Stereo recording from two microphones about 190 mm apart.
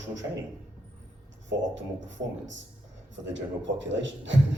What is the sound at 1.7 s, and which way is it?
A man's voice, 75° right (ahead or behind).